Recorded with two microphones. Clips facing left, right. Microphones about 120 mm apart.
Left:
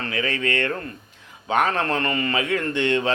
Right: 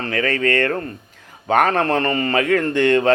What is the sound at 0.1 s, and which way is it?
Speech, 45° right (ahead or behind).